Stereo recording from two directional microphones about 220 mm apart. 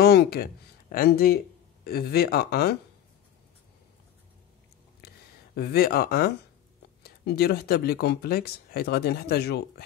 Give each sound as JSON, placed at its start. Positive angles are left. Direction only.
{"t": 0.0, "sound": "speech", "side_deg": 45}
{"t": 5.0, "sound": "a sound", "side_deg": 45}
{"t": 7.0, "sound": "speech", "side_deg": 45}